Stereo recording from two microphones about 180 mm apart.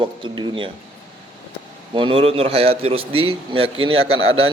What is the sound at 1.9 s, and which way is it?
A man's voice, 30° right (ahead or behind).